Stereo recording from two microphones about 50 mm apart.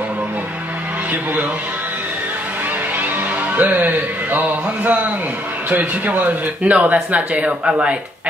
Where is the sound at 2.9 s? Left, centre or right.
Right.